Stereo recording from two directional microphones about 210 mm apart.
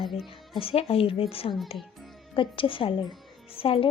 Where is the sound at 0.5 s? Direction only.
25° left (ahead or behind).